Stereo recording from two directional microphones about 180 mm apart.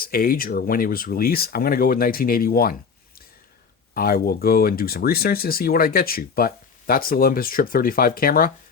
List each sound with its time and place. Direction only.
0.0 s speech: 55° left (ahead or behind)
3.9 s speech: 55° left (ahead or behind)